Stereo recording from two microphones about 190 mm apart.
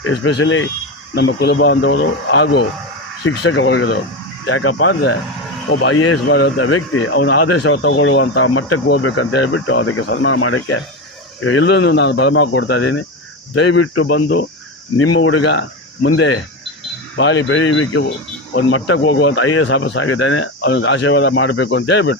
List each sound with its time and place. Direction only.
0.0 s speech: 75° left (ahead or behind)
1.1 s a man's voice: 65° left (ahead or behind)
4.4 s a man's voice: 90° left; by 13.0 s 65° left (ahead or behind)
13.7 s a man's voice: 90° left; by 14.4 s 65° left (ahead or behind)
14.9 s speech: 90° left; by 15.6 s 70° left (ahead or behind)
17.2 s a man's voice: 75° left (ahead or behind)